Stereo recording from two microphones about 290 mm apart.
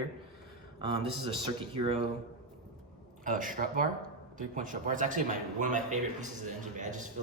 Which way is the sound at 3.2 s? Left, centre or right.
Right.